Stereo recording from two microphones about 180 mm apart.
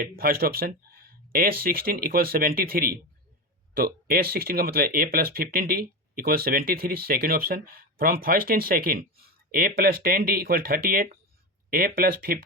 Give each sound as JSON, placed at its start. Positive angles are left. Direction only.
{"t": 0.0, "sound": "speech", "side_deg": -55}